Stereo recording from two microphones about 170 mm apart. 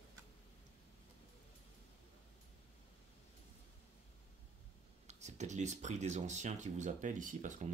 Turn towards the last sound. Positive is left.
turn(degrees=-50)  # may be behind; listen again after turning